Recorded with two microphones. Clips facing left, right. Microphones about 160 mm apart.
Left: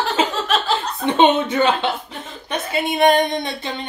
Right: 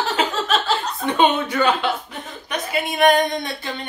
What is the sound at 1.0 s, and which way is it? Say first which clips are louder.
A woman's voice: left 4 dB; 25° left (ahead or behind).